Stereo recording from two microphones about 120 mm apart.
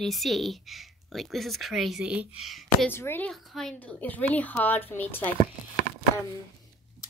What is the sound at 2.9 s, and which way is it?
Speech, 20° left (ahead or behind).